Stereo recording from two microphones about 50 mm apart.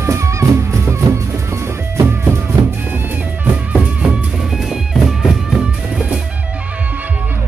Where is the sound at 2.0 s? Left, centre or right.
Right.